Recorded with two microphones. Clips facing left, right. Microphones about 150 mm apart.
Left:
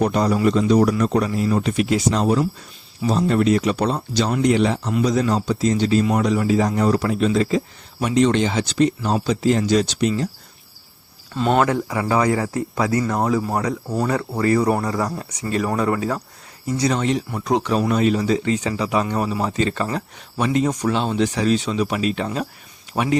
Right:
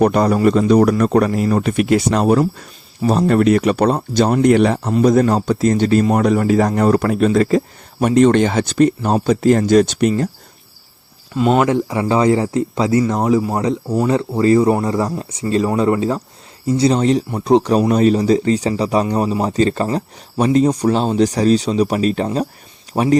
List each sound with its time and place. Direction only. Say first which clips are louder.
0.0 s speech: right 5 dB; 55° right (ahead or behind)
0.3 s speech: right 3 dB; 45° right (ahead or behind)
11.3 s speech: right 4 dB; 10° right (ahead or behind)
11.7 s speech: right 4 dB; 25° right (ahead or behind)